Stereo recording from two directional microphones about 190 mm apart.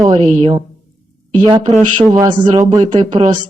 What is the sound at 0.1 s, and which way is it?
Speech, 35° right (ahead or behind).